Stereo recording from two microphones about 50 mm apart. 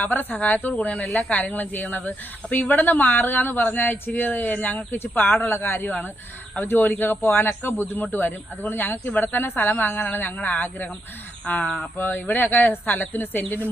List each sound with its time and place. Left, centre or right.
0.0 s speech: left
0.9 s speech: centre
1.3 s a man's voice: left
10.3 s speech: left
11.9 s speech: left